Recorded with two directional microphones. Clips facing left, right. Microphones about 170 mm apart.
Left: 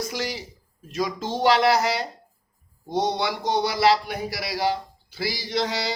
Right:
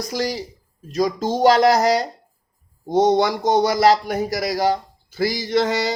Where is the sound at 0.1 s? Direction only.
40° right (ahead or behind).